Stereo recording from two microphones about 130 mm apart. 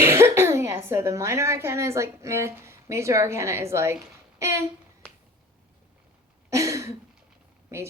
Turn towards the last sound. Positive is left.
turn(degrees=-20)  # may be behind; listen again after turning